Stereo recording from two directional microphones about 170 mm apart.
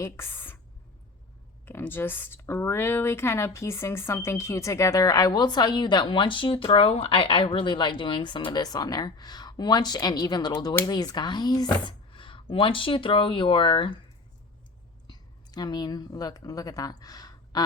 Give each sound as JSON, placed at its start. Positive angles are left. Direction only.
{"t": 0.0, "sound": "a woman's voice", "side_deg": 15}
{"t": 1.6, "sound": "speech", "side_deg": 10}
{"t": 15.0, "sound": "a woman's voice", "side_deg": 25}